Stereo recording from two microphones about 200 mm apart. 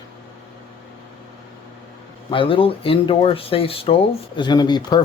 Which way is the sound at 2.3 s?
25° left (ahead or behind).